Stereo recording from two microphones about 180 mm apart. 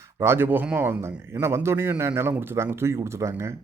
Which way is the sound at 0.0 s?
15° right (ahead or behind).